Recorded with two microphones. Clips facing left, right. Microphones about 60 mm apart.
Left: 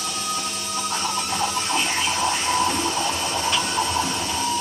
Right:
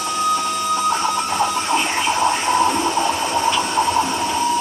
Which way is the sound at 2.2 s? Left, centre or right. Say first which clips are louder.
Right 6 dB; right.